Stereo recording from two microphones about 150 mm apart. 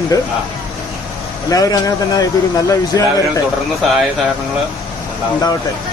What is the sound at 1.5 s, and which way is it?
Speech, 25° left (ahead or behind).